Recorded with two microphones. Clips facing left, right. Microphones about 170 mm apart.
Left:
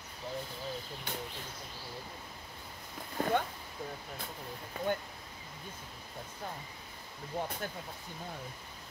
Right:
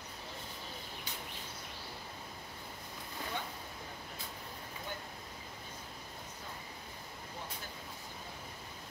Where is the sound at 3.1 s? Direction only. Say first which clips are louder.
Left 11 dB; 55° left (ahead or behind).